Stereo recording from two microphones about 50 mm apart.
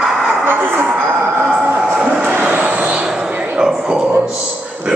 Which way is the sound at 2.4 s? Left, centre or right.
Right.